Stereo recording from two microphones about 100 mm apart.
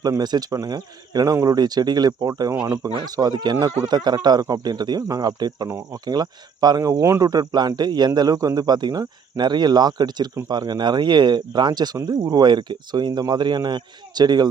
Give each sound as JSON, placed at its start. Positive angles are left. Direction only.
{"t": 0.0, "sound": "speech", "side_deg": -40}
{"t": 5.6, "sound": "speech", "side_deg": -25}
{"t": 6.1, "sound": "speech", "side_deg": -40}